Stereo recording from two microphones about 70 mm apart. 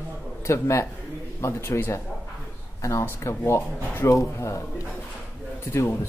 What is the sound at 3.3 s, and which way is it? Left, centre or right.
Speech, left.